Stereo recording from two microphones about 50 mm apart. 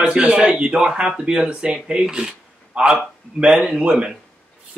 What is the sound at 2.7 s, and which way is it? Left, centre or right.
A man's voice, right.